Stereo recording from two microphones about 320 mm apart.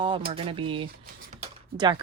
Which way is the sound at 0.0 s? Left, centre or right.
Centre.